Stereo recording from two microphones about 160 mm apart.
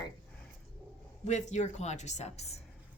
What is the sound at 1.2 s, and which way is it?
A woman's voice, 45° left (ahead or behind).